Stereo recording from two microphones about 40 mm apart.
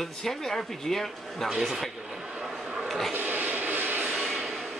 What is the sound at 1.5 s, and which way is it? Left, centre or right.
Speech, centre.